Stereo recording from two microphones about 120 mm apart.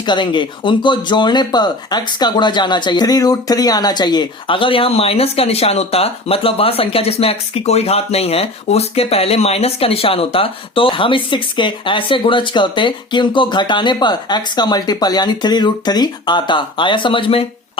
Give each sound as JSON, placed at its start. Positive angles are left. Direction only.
{"t": 0.0, "sound": "speech", "side_deg": 40}